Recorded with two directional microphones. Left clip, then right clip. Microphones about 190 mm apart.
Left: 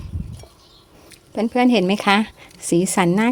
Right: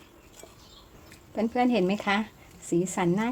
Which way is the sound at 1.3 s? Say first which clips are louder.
Left 8 dB; 35° left (ahead or behind).